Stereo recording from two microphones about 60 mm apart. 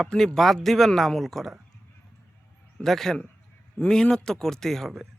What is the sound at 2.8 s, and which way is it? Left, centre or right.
Speech, centre.